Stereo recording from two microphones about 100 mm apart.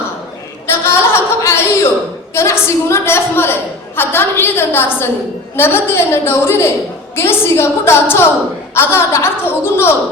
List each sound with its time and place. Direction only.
0.7 s a woman's voice: 25° left (ahead or behind)